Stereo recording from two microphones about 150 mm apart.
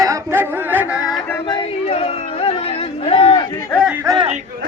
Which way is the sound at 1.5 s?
35° left (ahead or behind).